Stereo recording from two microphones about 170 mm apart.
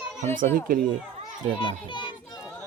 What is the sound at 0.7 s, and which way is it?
Speech, 55° right (ahead or behind).